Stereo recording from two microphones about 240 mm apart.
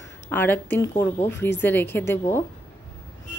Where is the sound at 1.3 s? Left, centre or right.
Left.